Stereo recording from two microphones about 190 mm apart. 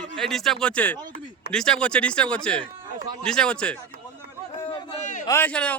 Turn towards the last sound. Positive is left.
turn(degrees=5)  # may be behind; listen again after turning